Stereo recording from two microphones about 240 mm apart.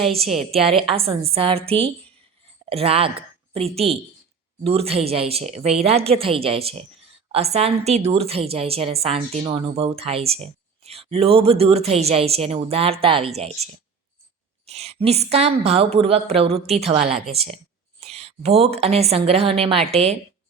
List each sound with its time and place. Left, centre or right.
0.3 s a woman's voice: centre
0.7 s a woman's voice: right
14.7 s a woman's voice: right